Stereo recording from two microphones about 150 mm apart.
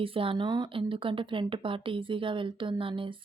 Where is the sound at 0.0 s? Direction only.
35° right (ahead or behind).